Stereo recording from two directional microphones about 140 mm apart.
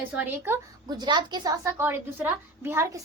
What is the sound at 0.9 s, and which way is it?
A child's voice, 30° right (ahead or behind).